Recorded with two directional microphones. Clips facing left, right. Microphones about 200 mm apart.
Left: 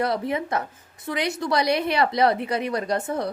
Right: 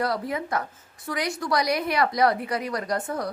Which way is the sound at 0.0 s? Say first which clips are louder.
Left 3 dB; 25° left (ahead or behind).